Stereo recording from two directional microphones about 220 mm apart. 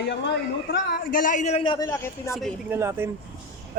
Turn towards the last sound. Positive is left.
turn(degrees=-10)  # may be behind; listen again after turning